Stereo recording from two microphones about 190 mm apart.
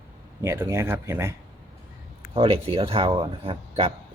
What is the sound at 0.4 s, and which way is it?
Speech, 15° right (ahead or behind).